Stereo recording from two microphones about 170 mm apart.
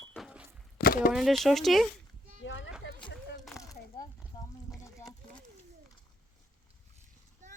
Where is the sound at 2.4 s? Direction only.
90° left.